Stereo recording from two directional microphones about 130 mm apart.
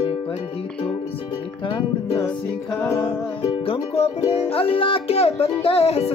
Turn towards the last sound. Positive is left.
turn(degrees=50)  # may be behind; listen again after turning